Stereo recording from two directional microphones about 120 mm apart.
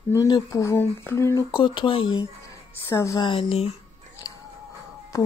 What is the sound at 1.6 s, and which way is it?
Speech, 45° left (ahead or behind).